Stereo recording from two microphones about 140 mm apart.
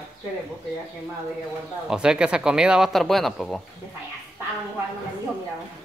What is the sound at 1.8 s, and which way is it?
Speech, 5° right (ahead or behind).